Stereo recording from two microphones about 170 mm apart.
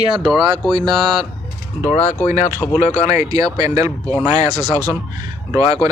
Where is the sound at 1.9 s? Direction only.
45° left (ahead or behind).